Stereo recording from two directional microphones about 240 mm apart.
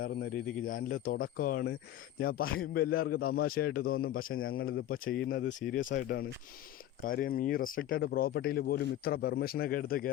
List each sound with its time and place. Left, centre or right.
0.0 s speech: left
4.4 s speech: left
4.9 s speech: left